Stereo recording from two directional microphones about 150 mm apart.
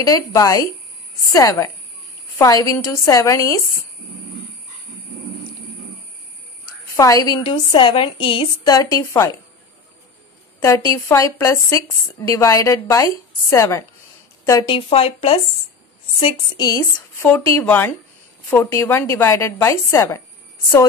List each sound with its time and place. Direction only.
0.0 s a woman's voice: 25° left (ahead or behind)
7.0 s a woman's voice: 25° left (ahead or behind)
7.4 s a woman's voice: 35° left (ahead or behind)
8.9 s a woman's voice: 20° left (ahead or behind)
10.6 s a woman's voice: 20° left (ahead or behind)
14.7 s a woman's voice: 40° left (ahead or behind)
17.2 s a woman's voice: 10° left (ahead or behind)